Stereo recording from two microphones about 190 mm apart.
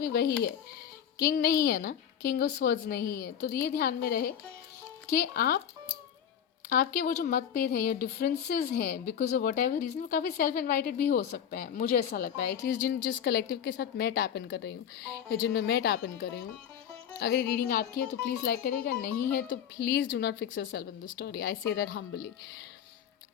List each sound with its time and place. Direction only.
0.0 s speech: 50° left (ahead or behind)
6.7 s a woman's voice: 50° left (ahead or behind)